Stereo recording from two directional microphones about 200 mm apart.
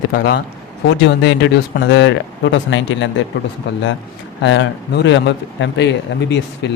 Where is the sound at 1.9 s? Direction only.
65° left (ahead or behind).